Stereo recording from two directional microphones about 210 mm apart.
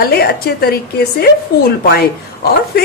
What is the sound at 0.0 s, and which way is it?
Speech, 45° left (ahead or behind).